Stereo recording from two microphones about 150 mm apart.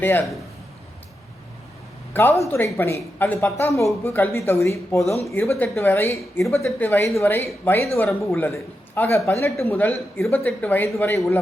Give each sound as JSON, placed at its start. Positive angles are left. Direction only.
{"t": 0.0, "sound": "a man's voice", "side_deg": 15}
{"t": 2.1, "sound": "a man's voice", "side_deg": 15}